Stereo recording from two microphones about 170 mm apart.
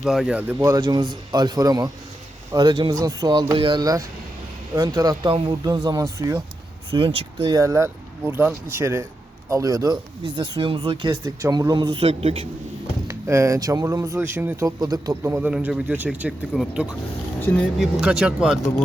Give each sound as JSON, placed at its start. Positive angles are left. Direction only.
{"t": 0.0, "sound": "speech", "side_deg": 0}
{"t": 0.8, "sound": "speech", "side_deg": -25}
{"t": 6.9, "sound": "speech", "side_deg": -30}
{"t": 13.1, "sound": "speech", "side_deg": -15}
{"t": 17.5, "sound": "speech", "side_deg": 10}
{"t": 18.0, "sound": "speech", "side_deg": -5}